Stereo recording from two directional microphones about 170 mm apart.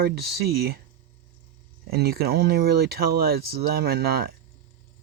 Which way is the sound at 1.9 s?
65° right (ahead or behind).